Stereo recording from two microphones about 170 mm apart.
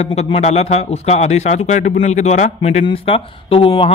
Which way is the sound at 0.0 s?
40° left (ahead or behind).